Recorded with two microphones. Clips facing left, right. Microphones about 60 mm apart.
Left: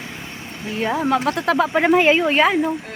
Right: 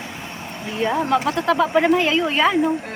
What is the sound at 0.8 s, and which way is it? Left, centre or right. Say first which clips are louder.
Speech: even; centre.